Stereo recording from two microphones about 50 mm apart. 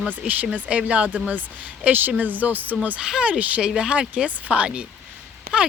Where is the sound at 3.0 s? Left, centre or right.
Centre.